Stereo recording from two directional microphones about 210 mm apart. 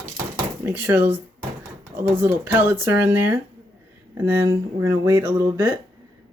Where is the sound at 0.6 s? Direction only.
10° right (ahead or behind).